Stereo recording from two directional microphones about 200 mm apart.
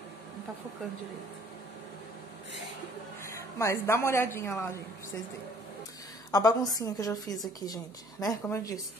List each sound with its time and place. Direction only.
3.3 s a woman's voice: 15° left (ahead or behind)
6.3 s a woman's voice: 20° left (ahead or behind)